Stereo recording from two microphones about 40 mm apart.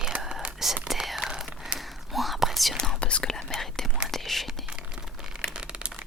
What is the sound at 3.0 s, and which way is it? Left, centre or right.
Whispering, left.